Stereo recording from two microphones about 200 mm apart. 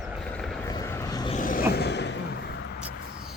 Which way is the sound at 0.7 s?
15° left (ahead or behind).